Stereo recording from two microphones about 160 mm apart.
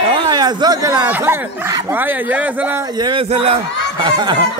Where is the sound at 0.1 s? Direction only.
25° right (ahead or behind).